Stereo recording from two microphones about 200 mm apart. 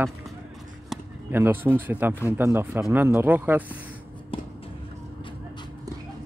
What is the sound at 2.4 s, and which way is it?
Speech, 15° right (ahead or behind).